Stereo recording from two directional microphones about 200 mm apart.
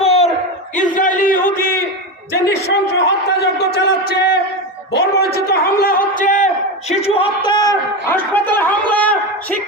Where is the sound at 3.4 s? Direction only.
55° left (ahead or behind); by 8.2 s 20° left (ahead or behind).